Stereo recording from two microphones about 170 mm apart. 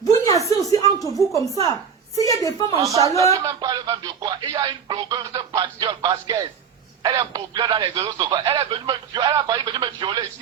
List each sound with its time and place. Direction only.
0.1 s a sound: 20° left (ahead or behind)
1.1 s a woman's voice: centre (ahead or behind)
1.6 s a woman's voice: 20° left (ahead or behind)
2.8 s speech: 20° right (ahead or behind)